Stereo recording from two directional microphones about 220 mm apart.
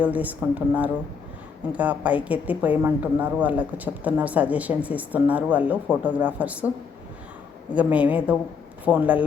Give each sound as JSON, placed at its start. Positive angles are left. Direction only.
{"t": 0.0, "sound": "a woman's voice", "side_deg": -5}
{"t": 7.7, "sound": "a woman's voice", "side_deg": -5}